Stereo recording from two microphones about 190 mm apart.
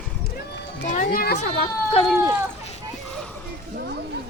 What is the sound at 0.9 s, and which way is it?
Music, 45° left (ahead or behind).